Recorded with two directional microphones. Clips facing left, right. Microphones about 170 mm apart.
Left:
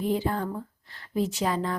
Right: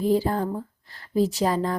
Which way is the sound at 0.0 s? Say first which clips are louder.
Right 5 dB; 35° right (ahead or behind).